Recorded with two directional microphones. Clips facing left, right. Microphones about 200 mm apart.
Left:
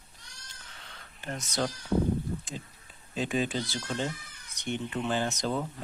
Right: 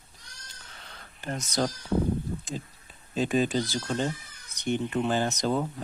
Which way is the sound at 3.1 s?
40° right (ahead or behind).